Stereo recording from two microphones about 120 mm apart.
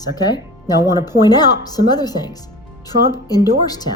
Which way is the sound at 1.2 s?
35° left (ahead or behind).